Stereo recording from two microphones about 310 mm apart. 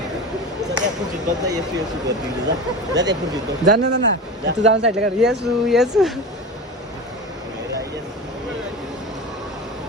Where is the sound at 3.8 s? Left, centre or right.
Right.